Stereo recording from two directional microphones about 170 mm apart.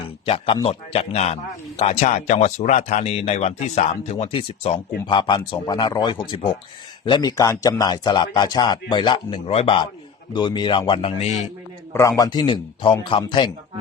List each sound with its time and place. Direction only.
0.3 s a man's voice: 30° left (ahead or behind)
11.9 s a man's voice: 20° left (ahead or behind)